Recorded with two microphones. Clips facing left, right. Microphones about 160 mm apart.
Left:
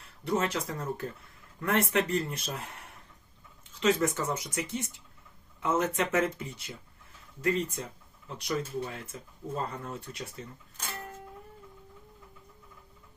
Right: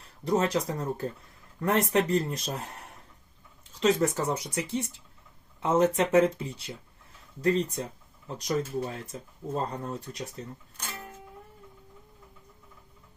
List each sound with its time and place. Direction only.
0.0 s speech: 35° right (ahead or behind)